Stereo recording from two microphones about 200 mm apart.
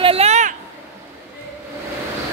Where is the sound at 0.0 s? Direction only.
30° right (ahead or behind).